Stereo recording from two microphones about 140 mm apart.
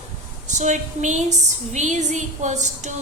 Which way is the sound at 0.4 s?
60° right (ahead or behind).